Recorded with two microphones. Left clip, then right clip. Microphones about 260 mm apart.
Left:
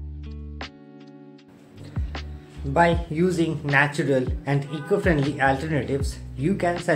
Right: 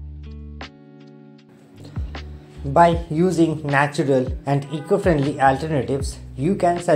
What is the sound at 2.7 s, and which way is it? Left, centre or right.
Speech, centre.